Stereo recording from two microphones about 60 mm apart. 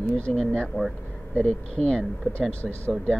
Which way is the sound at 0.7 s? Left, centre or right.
Left.